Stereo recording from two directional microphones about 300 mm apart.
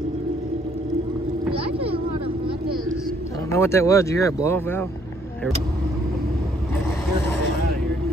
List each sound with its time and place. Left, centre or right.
1.8 s vehicle: centre
3.5 s speech: centre